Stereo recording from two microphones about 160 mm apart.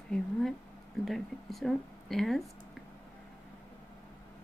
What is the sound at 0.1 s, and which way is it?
Speech, centre (ahead or behind).